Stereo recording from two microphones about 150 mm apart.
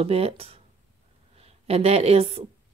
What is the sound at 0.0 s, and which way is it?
A woman's voice, 40° right (ahead or behind).